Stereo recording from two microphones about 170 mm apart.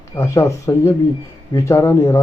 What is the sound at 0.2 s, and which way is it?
A man's voice, 20° left (ahead or behind).